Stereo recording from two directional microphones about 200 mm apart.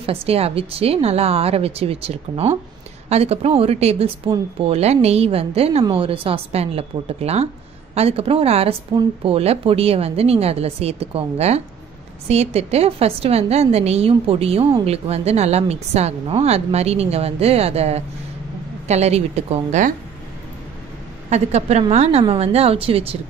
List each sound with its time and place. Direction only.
0.0 s a woman's voice: 30° right (ahead or behind)
21.3 s a woman's voice: 35° right (ahead or behind)